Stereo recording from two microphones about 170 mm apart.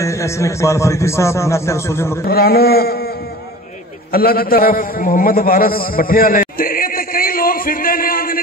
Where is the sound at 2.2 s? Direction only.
65° left (ahead or behind).